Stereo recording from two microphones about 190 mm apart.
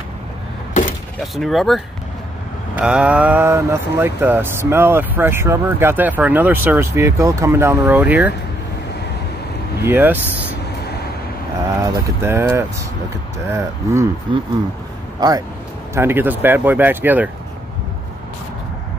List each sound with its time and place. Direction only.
1.2 s speech: centre (ahead or behind)
9.8 s speech: 10° right (ahead or behind)
11.8 s speech: 15° right (ahead or behind)
14.3 s speech: 25° right (ahead or behind); by 17.3 s 10° right (ahead or behind)